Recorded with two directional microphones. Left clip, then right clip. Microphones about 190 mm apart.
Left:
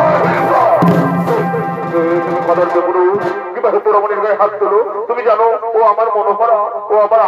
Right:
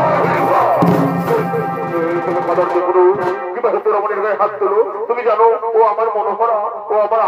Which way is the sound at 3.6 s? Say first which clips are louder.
Left 4 dB; 30° left (ahead or behind).